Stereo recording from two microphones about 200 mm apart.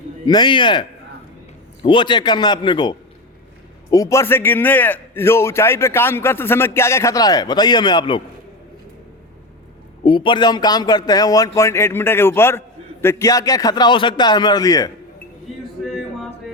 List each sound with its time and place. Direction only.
0.3 s a man's voice: 20° left (ahead or behind)
10.0 s speech: 25° left (ahead or behind)